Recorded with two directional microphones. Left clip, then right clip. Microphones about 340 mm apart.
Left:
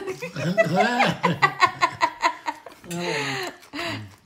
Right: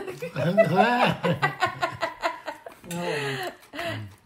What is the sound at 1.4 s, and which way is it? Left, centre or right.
Laughter, left.